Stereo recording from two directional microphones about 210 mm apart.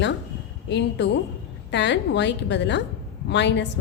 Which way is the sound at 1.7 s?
55° left (ahead or behind).